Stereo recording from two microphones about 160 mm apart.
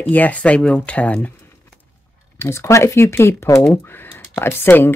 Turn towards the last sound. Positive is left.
turn(degrees=15)  # may be behind; listen again after turning